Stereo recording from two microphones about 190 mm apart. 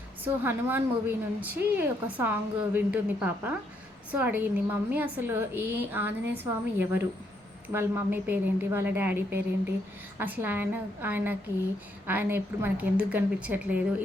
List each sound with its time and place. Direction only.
0.4 s a woman's voice: 10° right (ahead or behind)